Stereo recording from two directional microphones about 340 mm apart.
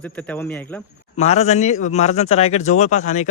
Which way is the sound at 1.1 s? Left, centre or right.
Centre.